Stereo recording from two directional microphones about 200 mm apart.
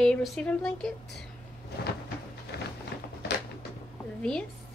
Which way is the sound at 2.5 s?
55° left (ahead or behind).